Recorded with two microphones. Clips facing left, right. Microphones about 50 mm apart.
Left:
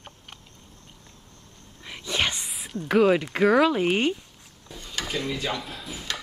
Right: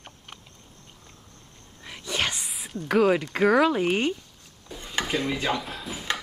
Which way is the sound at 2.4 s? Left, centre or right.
Centre.